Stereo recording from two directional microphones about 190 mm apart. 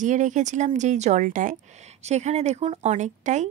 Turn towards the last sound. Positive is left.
turn(degrees=-40)  # may be behind; listen again after turning